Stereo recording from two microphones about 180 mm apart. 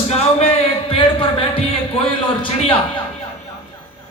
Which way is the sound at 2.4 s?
30° left (ahead or behind).